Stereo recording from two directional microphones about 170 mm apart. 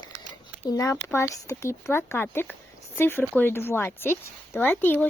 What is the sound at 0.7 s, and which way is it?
Speech, 20° left (ahead or behind).